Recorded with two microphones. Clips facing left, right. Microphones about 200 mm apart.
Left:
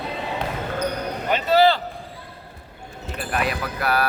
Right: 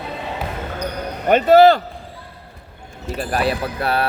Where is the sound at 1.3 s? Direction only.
50° right (ahead or behind).